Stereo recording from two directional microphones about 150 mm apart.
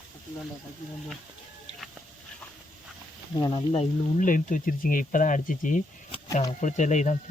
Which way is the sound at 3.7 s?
45° left (ahead or behind).